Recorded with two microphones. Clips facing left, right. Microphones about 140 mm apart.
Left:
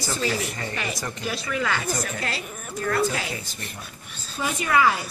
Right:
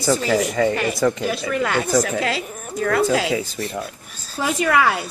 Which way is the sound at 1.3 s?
55° right (ahead or behind).